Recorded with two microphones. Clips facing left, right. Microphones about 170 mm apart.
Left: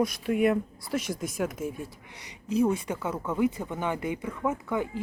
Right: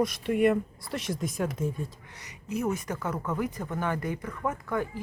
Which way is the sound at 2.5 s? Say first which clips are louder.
Left 5 dB; 30° left (ahead or behind).